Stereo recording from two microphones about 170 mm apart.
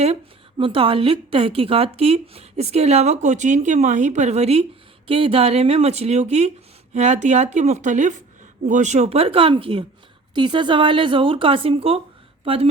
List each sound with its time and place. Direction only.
0.0 s a woman's voice: 35° right (ahead or behind)